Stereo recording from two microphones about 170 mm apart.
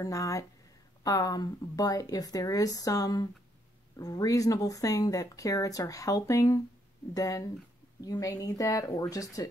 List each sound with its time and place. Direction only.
0.0 s speech: 20° left (ahead or behind)